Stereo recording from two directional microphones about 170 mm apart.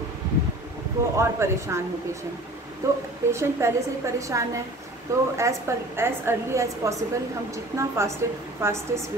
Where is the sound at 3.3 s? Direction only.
15° right (ahead or behind).